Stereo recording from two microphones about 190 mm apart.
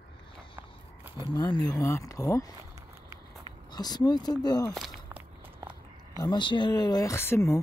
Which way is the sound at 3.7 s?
20° left (ahead or behind).